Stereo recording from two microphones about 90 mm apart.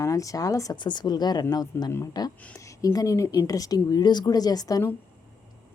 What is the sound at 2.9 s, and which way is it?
A woman's voice, 40° left (ahead or behind).